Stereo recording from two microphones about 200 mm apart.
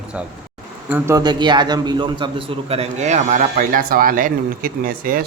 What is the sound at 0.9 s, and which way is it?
A man's voice, 10° right (ahead or behind).